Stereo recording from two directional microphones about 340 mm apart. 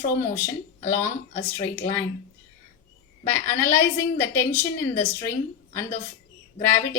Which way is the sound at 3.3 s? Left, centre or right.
Centre.